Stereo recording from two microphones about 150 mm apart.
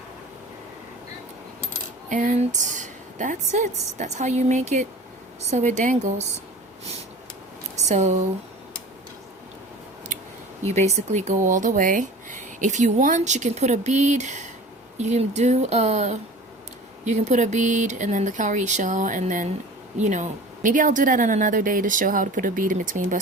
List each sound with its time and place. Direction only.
2.0 s speech: 55° right (ahead or behind)
7.8 s speech: 50° right (ahead or behind)
10.7 s speech: 50° right (ahead or behind)